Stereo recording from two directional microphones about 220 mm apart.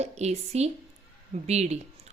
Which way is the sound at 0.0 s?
30° right (ahead or behind).